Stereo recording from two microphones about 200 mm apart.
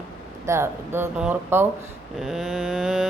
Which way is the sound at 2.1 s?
Centre (ahead or behind).